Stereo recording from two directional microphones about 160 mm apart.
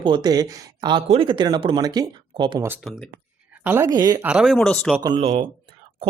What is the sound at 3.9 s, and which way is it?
Speech, 25° right (ahead or behind).